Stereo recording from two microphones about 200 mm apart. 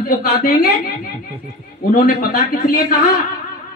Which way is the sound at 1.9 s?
45° left (ahead or behind).